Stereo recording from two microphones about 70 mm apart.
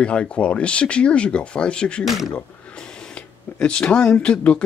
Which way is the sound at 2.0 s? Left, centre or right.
Centre.